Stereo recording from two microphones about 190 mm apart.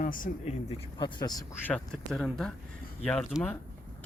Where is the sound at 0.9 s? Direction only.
20° left (ahead or behind).